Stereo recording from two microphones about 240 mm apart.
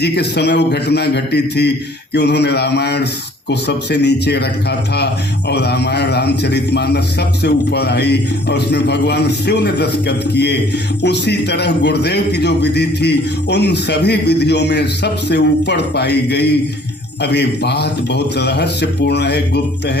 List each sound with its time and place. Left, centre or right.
0.0 s a man's voice: left
5.5 s a man's voice: left